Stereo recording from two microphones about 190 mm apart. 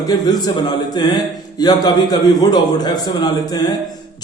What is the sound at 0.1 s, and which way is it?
A man's voice, 20° left (ahead or behind).